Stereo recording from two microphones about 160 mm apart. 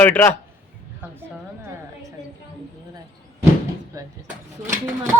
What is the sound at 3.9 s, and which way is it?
Vehicle, 20° right (ahead or behind).